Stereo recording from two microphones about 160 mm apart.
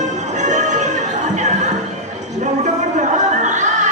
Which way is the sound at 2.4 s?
50° right (ahead or behind).